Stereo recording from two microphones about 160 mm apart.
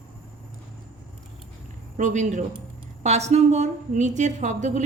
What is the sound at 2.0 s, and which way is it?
A woman's voice, 50° right (ahead or behind).